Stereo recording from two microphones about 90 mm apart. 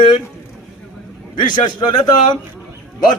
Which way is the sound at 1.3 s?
55° left (ahead or behind).